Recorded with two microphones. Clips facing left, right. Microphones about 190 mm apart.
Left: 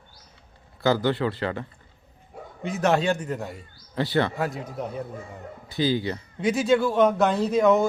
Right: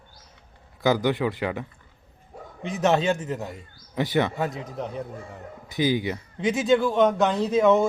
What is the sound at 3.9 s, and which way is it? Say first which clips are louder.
Speech: even; 15° right (ahead or behind).